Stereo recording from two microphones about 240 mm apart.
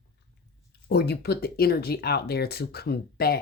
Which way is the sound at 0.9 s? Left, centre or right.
Left.